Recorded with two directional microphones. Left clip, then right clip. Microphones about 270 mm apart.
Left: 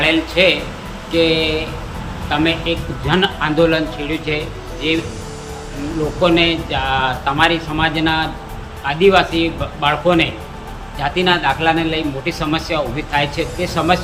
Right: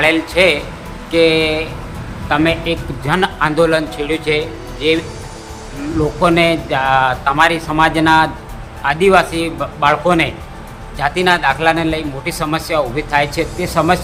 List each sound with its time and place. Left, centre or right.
0.0 s a man's voice: centre
6.2 s a man's voice: centre